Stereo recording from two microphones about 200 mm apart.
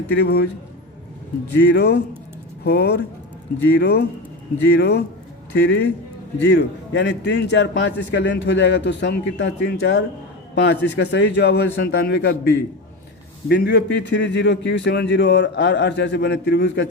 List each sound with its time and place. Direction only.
0.1 s a man's voice: 55° left (ahead or behind)
1.5 s a man's voice: 60° left (ahead or behind)